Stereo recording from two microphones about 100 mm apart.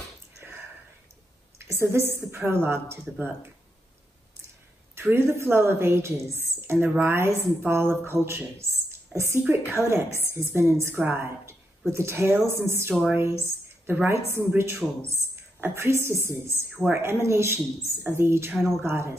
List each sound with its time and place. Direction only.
1.6 s speech: 25° right (ahead or behind)
4.9 s a woman's voice: 25° right (ahead or behind)